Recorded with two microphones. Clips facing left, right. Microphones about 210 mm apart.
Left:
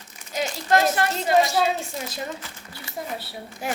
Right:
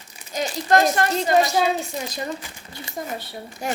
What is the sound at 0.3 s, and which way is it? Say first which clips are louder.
Speech: right 2 dB; 5° left (ahead or behind).